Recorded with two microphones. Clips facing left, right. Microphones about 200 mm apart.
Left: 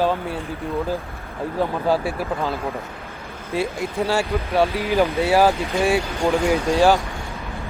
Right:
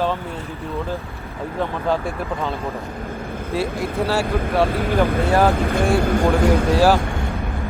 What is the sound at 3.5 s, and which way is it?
Speech, centre (ahead or behind).